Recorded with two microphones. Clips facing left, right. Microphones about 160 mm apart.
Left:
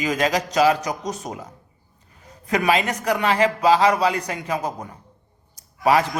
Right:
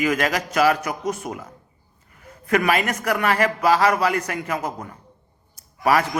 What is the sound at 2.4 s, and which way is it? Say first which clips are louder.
A man's voice: even; 15° left (ahead or behind).